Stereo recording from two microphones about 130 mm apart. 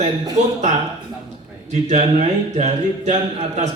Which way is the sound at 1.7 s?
60° right (ahead or behind).